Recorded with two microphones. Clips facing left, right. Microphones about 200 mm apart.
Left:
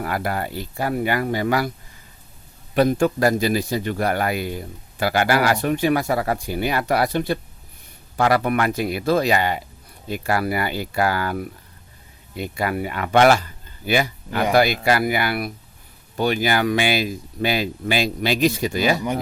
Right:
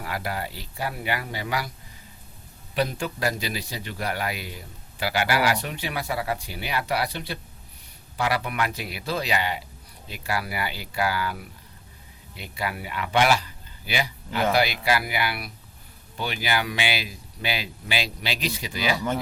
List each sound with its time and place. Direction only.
0.0 s a man's voice: 50° left (ahead or behind)
2.7 s a man's voice: 50° left (ahead or behind)
12.4 s a man's voice: 50° left (ahead or behind)